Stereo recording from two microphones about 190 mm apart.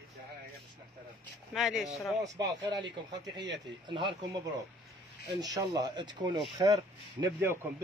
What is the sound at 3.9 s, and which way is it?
Speech, 25° right (ahead or behind).